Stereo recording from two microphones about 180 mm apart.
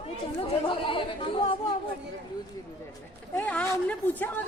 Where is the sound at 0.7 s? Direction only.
30° left (ahead or behind).